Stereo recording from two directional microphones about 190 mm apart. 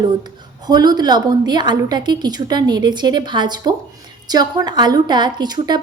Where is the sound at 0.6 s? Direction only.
20° right (ahead or behind).